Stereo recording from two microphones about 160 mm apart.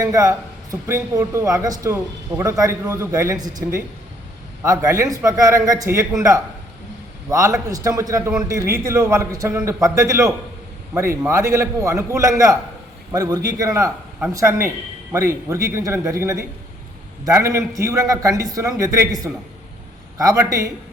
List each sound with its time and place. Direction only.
0.0 s a man's voice: 20° right (ahead or behind)